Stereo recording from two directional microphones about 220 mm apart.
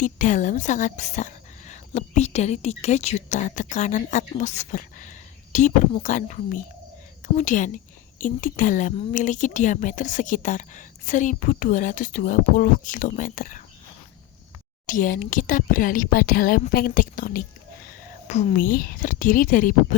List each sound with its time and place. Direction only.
0.0 s a woman's voice: 35° left (ahead or behind)
14.8 s a woman's voice: 35° left (ahead or behind)